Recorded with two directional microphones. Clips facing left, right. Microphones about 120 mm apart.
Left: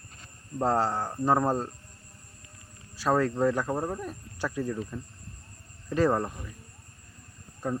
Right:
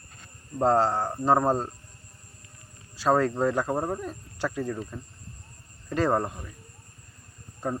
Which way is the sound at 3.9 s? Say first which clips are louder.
Right 2 dB; 25° right (ahead or behind).